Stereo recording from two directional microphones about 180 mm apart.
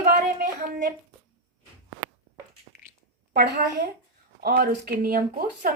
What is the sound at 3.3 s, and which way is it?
A woman's voice, 55° right (ahead or behind).